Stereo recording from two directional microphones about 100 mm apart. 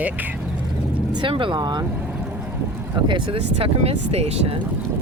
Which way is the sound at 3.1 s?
65° right (ahead or behind).